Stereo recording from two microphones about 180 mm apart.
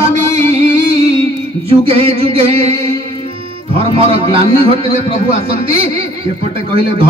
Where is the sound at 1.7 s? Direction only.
30° right (ahead or behind).